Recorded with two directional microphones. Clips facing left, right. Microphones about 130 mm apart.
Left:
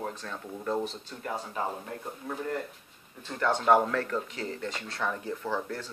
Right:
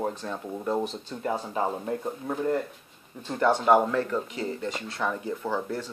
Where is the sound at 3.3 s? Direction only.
20° right (ahead or behind).